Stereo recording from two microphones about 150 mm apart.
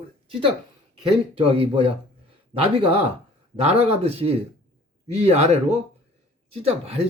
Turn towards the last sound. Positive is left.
turn(degrees=-45)  # may be behind; listen again after turning